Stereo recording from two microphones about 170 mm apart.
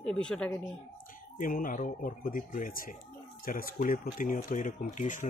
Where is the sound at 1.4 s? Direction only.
55° left (ahead or behind).